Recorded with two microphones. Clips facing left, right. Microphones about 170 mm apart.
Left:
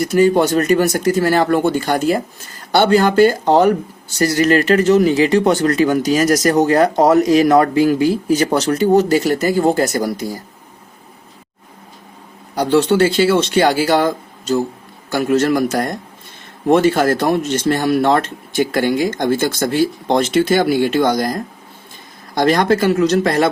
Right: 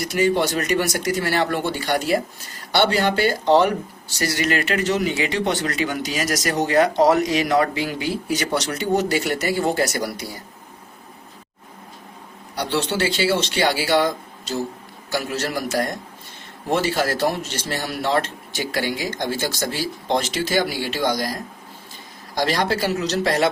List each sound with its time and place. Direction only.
0.0 s speech: 40° left (ahead or behind)
12.6 s speech: 50° left (ahead or behind)
15.2 s speech: 55° left (ahead or behind)
16.6 s speech: 55° left (ahead or behind)
22.4 s speech: 60° left (ahead or behind)